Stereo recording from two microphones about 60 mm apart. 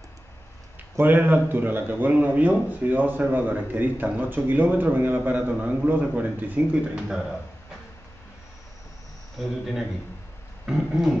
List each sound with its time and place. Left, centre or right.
0.9 s a man's voice: right
9.4 s speech: centre